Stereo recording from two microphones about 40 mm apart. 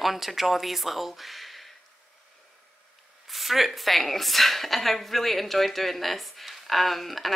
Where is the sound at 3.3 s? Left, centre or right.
Centre.